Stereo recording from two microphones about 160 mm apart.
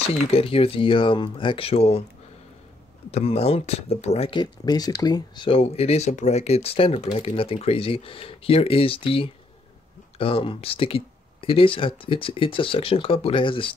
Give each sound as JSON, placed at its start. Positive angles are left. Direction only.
{"t": 0.0, "sound": "speech", "side_deg": 40}
{"t": 3.1, "sound": "speech", "side_deg": 40}
{"t": 4.4, "sound": "speech", "side_deg": 25}